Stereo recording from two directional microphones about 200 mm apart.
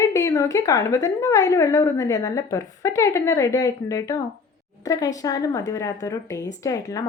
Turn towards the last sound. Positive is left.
turn(degrees=15)  # may be behind; listen again after turning